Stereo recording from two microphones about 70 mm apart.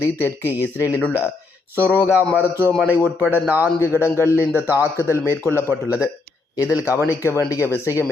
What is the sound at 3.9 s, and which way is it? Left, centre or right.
Speech, left.